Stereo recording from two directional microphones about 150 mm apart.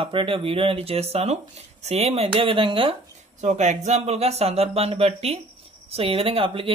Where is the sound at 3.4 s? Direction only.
50° right (ahead or behind).